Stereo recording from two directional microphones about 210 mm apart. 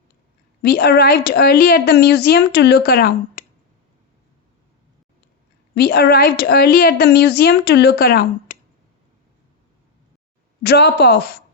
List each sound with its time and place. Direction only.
0.6 s a woman's voice: 50° left (ahead or behind)
5.7 s a woman's voice: 50° left (ahead or behind)
10.6 s a woman's voice: 50° left (ahead or behind)